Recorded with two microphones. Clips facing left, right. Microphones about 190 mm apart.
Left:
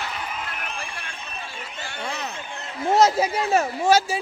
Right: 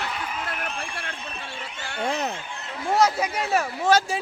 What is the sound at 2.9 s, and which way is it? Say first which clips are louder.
Speech: left 3 dB; 25° left (ahead or behind).